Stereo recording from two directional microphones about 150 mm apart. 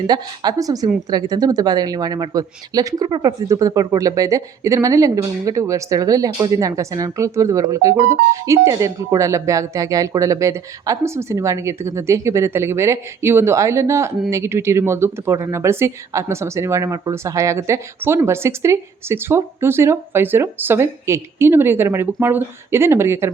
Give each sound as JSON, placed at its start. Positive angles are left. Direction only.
{"t": 0.1, "sound": "speech", "side_deg": -25}